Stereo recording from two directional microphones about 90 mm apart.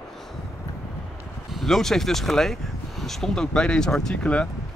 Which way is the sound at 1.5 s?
Centre (ahead or behind).